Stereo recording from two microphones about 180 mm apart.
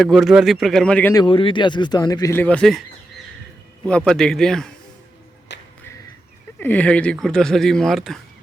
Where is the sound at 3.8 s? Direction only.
5° left (ahead or behind).